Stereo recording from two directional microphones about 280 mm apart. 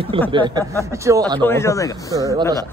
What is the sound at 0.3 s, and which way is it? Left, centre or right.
Speech, centre.